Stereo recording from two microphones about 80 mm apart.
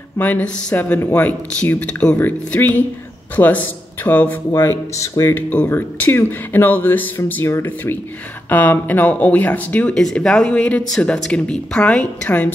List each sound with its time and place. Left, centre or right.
0.2 s speech: centre
4.6 s speech: left
5.3 s speech: centre
9.9 s a woman's voice: centre